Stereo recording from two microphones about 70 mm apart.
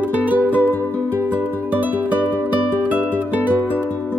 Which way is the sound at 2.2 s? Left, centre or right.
Left.